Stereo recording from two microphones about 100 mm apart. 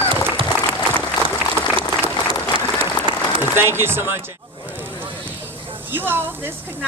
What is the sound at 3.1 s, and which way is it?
Applause, 55° right (ahead or behind).